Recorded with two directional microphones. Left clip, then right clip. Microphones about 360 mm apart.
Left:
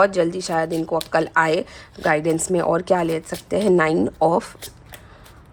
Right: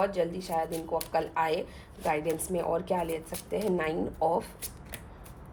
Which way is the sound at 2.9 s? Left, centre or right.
Left.